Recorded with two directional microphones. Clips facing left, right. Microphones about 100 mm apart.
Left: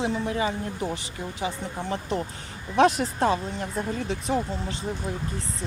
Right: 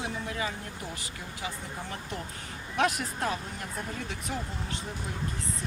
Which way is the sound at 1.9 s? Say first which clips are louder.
Left 9 dB; 25° left (ahead or behind).